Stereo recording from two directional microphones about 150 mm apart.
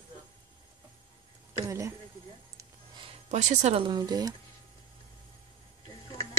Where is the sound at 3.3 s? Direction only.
50° right (ahead or behind).